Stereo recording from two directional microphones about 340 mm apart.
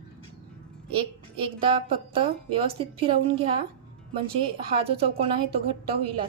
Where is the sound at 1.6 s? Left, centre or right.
Centre.